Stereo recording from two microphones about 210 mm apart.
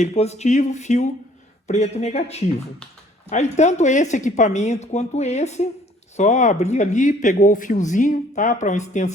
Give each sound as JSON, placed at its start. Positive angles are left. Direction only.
{"t": 0.0, "sound": "speech", "side_deg": 30}